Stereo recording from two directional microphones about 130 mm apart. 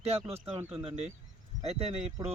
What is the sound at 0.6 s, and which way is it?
Speech, 15° right (ahead or behind).